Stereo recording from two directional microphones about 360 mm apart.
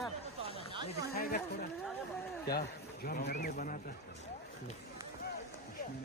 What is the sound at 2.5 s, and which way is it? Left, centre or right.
Speech, left.